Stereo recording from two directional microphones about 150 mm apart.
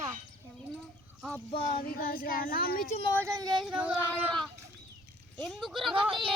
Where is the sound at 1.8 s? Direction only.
85° left.